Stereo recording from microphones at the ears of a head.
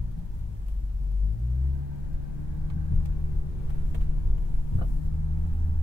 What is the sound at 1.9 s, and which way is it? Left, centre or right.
Vehicle, left.